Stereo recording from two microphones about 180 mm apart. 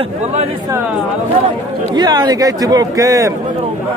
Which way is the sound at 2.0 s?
20° right (ahead or behind).